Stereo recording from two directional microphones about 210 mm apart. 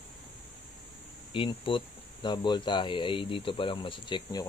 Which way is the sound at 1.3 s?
25° left (ahead or behind).